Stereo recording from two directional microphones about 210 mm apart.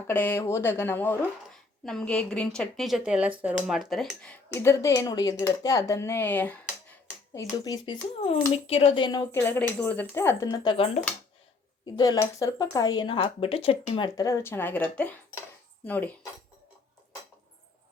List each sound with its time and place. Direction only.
0.1 s a woman's voice: 10° left (ahead or behind)
7.3 s speech: 20° left (ahead or behind)
11.9 s a woman's voice: 15° left (ahead or behind)